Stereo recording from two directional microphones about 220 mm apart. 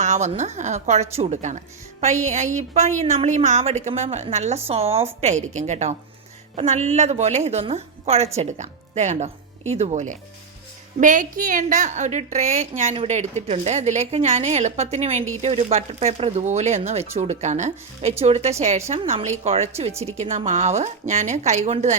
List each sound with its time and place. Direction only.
0.0 s a woman's voice: 30° right (ahead or behind)